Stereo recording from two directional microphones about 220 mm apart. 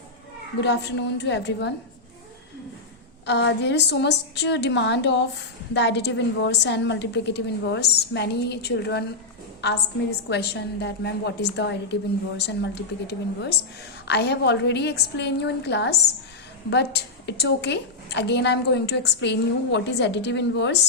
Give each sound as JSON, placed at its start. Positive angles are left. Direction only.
{"t": 0.6, "sound": "a woman's voice", "side_deg": 50}
{"t": 3.2, "sound": "a woman's voice", "side_deg": 50}